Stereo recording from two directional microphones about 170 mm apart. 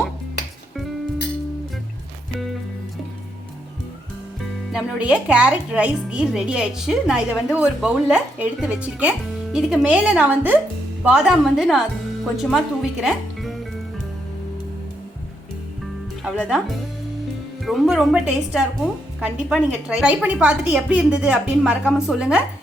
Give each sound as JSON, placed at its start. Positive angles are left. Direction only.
{"t": 4.7, "sound": "speech", "side_deg": -5}
{"t": 16.2, "sound": "speech", "side_deg": -5}